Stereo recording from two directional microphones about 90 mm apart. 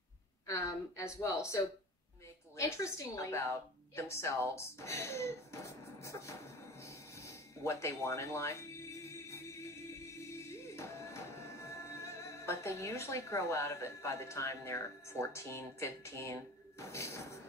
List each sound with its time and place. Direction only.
0.5 s speech: 35° left (ahead or behind)
2.5 s speech: 35° left (ahead or behind)
6.8 s a sound: 30° left (ahead or behind)